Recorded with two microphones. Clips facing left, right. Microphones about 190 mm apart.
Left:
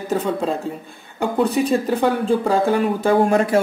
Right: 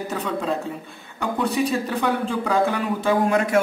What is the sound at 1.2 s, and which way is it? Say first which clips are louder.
Speech: left 4 dB; 40° left (ahead or behind).